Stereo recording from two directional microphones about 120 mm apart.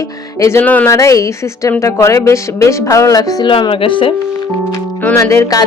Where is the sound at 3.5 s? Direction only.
45° left (ahead or behind).